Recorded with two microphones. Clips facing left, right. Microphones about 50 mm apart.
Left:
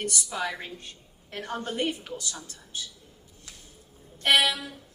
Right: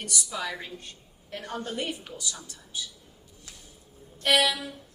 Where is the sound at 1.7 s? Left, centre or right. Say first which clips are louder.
Left 4 dB; left.